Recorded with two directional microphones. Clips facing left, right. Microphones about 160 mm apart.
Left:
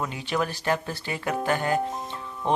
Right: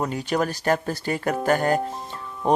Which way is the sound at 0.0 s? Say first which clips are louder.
Right 4 dB; 40° right (ahead or behind).